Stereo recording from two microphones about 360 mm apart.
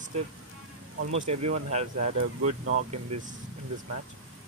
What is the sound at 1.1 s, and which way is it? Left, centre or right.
Speech, centre.